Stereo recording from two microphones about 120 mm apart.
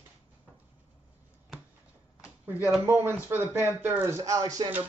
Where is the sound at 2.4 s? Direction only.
15° right (ahead or behind).